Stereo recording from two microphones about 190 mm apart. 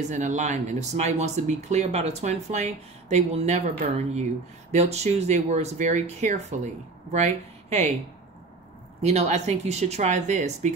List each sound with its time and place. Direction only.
0.0 s speech: 40° right (ahead or behind)
9.0 s speech: 35° right (ahead or behind)